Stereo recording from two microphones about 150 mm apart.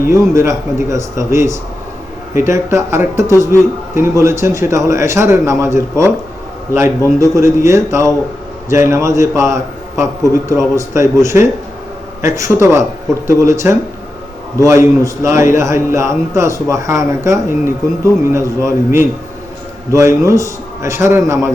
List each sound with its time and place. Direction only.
0.1 s speech: 20° right (ahead or behind)
7.2 s speech: 20° right (ahead or behind)